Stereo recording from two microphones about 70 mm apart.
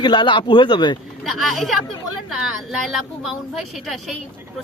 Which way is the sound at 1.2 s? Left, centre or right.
Centre.